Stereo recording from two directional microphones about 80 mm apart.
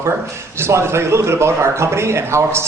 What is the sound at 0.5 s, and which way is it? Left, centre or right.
A man's voice, right.